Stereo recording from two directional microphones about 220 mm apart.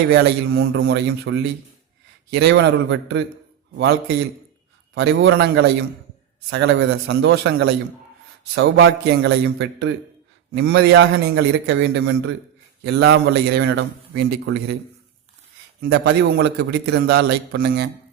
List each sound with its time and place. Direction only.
0.1 s a man's voice: 50° right (ahead or behind)
4.9 s a man's voice: 55° right (ahead or behind)
15.8 s a man's voice: 50° right (ahead or behind)